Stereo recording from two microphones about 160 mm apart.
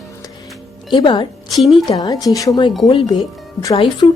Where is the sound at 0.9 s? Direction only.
30° left (ahead or behind).